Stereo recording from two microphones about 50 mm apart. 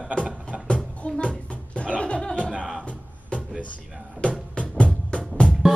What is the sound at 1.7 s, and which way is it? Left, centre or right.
Chuckle, left.